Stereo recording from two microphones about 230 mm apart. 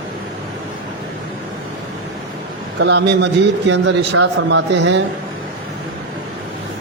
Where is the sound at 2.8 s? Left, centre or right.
Right.